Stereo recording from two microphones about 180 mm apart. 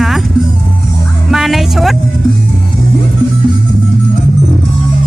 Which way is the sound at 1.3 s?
Centre (ahead or behind).